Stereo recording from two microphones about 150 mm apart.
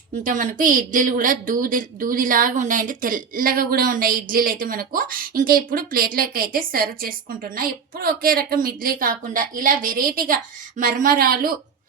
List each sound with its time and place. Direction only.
0.2 s speech: 65° right (ahead or behind)